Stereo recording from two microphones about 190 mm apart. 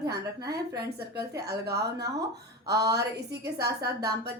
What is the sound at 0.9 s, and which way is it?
Speech, 60° right (ahead or behind).